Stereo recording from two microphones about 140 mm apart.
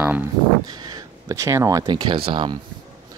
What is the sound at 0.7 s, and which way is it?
Speech, 25° right (ahead or behind).